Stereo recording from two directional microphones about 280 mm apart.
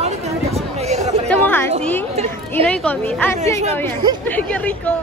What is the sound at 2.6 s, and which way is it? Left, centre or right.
A woman's voice, centre.